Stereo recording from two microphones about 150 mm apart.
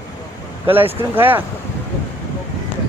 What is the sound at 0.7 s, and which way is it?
Speech, 15° right (ahead or behind).